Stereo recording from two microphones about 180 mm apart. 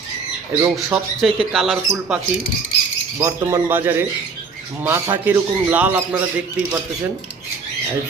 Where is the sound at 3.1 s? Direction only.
15° right (ahead or behind).